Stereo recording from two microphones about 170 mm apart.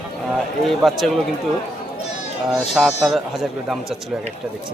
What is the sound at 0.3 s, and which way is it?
Speech, centre (ahead or behind).